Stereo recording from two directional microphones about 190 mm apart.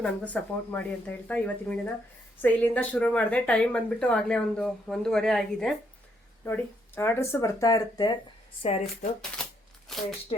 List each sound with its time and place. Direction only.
0.0 s speech: 10° left (ahead or behind)
8.6 s speech: 30° left (ahead or behind)
9.9 s a sound: centre (ahead or behind)